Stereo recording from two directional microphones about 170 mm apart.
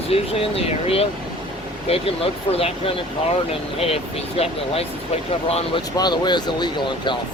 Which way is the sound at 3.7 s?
35° left (ahead or behind).